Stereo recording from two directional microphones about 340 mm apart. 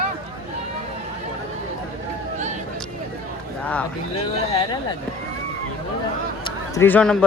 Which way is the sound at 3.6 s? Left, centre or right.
Centre.